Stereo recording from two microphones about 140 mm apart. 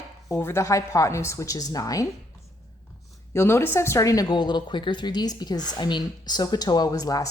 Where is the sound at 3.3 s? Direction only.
20° left (ahead or behind).